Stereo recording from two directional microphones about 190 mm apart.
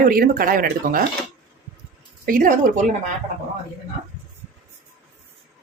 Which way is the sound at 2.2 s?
45° right (ahead or behind).